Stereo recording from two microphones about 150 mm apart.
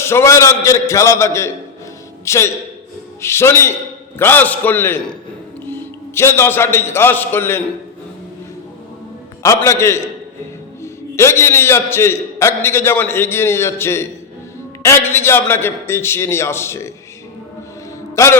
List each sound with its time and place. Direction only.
0.0 s a man's voice: 20° left (ahead or behind)
9.4 s a man's voice: 20° left (ahead or behind)
11.1 s a man's voice: 20° left (ahead or behind)
18.2 s a man's voice: 20° left (ahead or behind)